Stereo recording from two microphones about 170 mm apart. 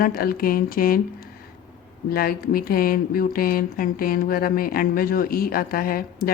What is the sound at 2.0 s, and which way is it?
Speech, 60° left (ahead or behind).